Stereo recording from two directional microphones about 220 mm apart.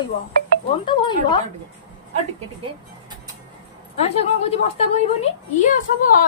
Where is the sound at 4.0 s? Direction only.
30° left (ahead or behind).